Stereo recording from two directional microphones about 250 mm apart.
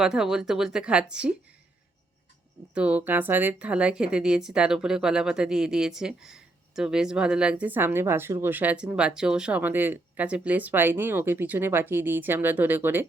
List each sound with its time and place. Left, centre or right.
0.0 s speech: centre
2.7 s speech: centre